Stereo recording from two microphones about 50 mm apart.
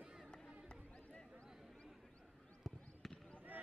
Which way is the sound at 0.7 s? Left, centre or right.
Centre.